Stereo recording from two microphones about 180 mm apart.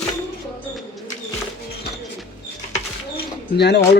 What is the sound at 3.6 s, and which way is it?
Speech, 70° left (ahead or behind).